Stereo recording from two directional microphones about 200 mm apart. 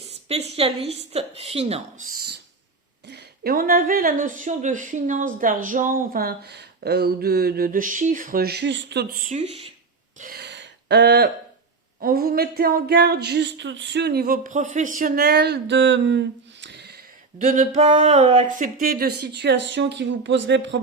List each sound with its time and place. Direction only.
0.3 s a woman's voice: 30° right (ahead or behind)
3.1 s a woman's voice: 55° right (ahead or behind); by 9.7 s 30° right (ahead or behind)
10.2 s a sound: 50° right (ahead or behind)
11.9 s a woman's voice: 45° right (ahead or behind)
17.3 s a woman's voice: 40° right (ahead or behind)
17.7 s a woman's voice: 30° right (ahead or behind); by 20.7 s 60° right (ahead or behind)